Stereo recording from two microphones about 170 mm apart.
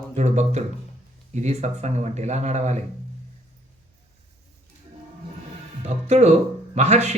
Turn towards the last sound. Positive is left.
turn(degrees=-40)  # may be behind; listen again after turning